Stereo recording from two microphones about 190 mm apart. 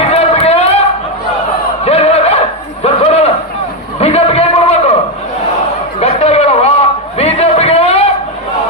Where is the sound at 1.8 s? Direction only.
35° left (ahead or behind).